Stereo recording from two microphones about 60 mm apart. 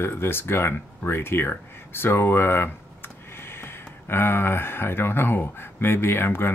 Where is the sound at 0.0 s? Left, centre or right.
Left.